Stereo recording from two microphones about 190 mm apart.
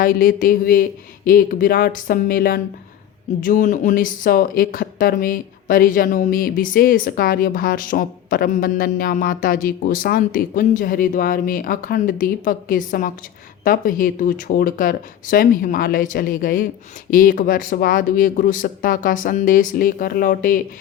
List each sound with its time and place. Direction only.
0.0 s speech: 45° left (ahead or behind)